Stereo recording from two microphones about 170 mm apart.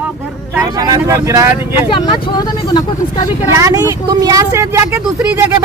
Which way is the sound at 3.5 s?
20° right (ahead or behind).